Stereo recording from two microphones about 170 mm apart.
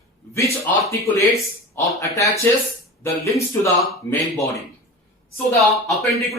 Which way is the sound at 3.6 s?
15° left (ahead or behind).